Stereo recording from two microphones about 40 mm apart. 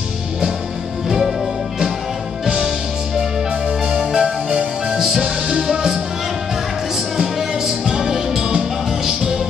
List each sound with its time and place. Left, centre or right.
1.0 s music: centre
2.4 s music: centre
7.2 s music: centre